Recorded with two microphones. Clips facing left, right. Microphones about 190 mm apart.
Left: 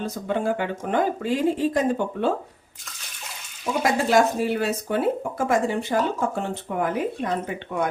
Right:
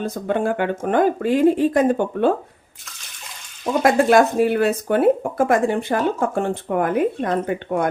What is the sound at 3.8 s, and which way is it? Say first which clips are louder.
A woman's voice: right 5 dB; 55° right (ahead or behind).